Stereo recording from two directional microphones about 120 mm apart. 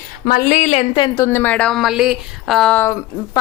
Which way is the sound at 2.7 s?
20° left (ahead or behind).